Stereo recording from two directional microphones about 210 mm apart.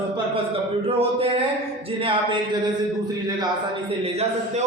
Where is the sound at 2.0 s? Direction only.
25° right (ahead or behind).